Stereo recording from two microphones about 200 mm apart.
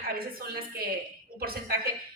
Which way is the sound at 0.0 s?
50° right (ahead or behind).